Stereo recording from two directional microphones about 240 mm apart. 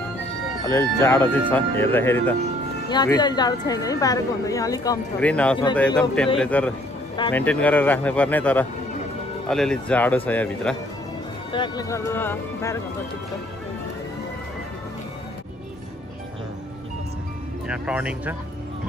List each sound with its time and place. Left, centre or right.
0.7 s a woman's voice: centre
7.2 s a woman's voice: centre
11.5 s a woman's voice: centre
17.6 s speech: centre